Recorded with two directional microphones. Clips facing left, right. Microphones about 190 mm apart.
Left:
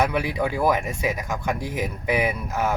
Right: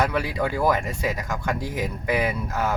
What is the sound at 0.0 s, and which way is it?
Speech, 15° left (ahead or behind).